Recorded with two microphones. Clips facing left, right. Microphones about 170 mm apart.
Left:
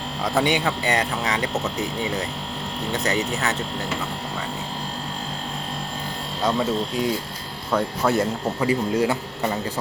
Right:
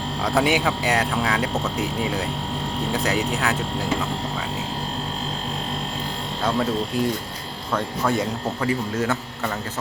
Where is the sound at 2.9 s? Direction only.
5° right (ahead or behind).